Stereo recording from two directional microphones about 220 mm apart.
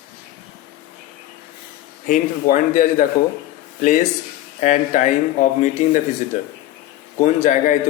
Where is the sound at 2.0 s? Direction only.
35° left (ahead or behind).